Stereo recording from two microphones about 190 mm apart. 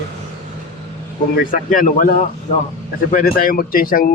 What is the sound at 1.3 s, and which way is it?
Speech, 45° left (ahead or behind).